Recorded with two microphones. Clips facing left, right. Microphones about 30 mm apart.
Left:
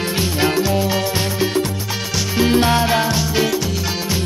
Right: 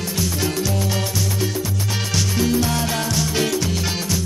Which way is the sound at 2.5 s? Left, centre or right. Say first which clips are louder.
Left 9 dB; left.